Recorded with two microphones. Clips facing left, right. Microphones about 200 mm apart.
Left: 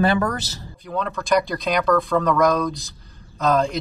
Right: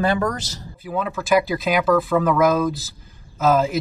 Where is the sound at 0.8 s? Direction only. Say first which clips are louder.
Right 1 dB; 5° right (ahead or behind).